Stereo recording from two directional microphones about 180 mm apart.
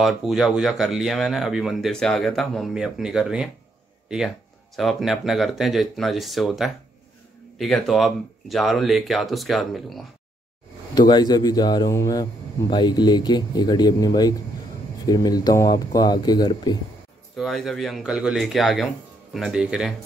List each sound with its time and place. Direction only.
0.0 s speech: centre (ahead or behind)
4.7 s speech: centre (ahead or behind)
11.0 s speech: 25° left (ahead or behind)
17.4 s speech: centre (ahead or behind)